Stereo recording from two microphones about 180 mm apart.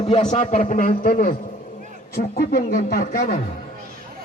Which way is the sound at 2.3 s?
55° left (ahead or behind).